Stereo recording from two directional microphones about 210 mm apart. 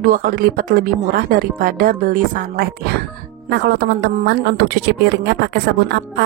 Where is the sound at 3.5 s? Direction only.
55° right (ahead or behind).